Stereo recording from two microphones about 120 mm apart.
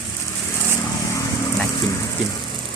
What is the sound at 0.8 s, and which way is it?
Vehicle, 25° left (ahead or behind).